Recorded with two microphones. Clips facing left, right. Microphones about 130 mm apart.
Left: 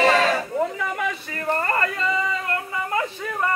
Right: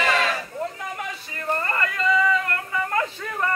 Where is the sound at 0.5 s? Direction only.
90° left; by 1.4 s 65° left (ahead or behind).